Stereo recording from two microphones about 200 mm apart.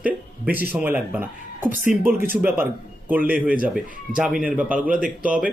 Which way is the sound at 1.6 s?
40° right (ahead or behind).